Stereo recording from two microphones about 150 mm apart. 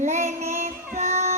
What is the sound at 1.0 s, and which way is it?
Child singing, 50° right (ahead or behind).